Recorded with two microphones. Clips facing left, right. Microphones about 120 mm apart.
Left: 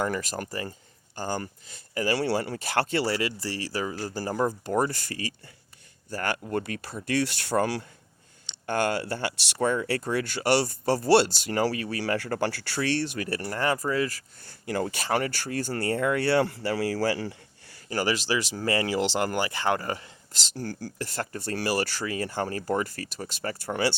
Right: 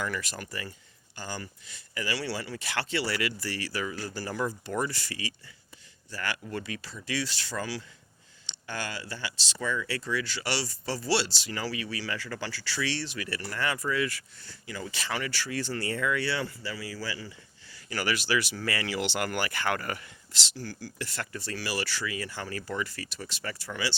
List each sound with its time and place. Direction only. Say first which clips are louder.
0.0 s speech: left 6 dB; 45° left (ahead or behind)
14.7 s speech: left 8 dB; 55° left (ahead or behind)
17.8 s speech: left 4 dB; 35° left (ahead or behind)
20.3 s speech: left 5 dB; 45° left (ahead or behind)